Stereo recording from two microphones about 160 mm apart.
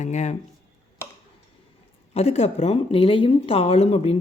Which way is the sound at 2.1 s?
40° left (ahead or behind).